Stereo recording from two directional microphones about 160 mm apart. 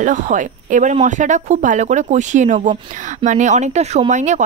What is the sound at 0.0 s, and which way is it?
Speech, 55° right (ahead or behind).